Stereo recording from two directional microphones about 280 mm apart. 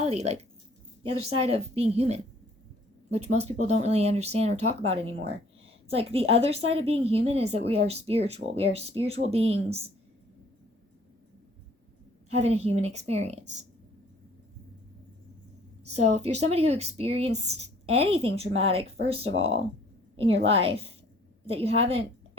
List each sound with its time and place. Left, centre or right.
0.0 s speech: right
1.4 s speech: right
12.3 s speech: right
16.0 s speech: right